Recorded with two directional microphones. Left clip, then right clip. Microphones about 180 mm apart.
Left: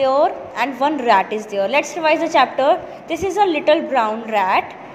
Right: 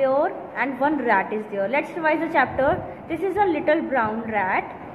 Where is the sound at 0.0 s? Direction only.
20° left (ahead or behind).